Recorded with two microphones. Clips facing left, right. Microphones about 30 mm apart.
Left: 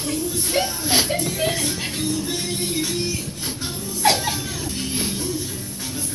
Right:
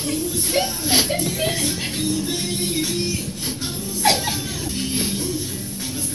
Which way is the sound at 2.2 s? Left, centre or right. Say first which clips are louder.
Right 1 dB; right.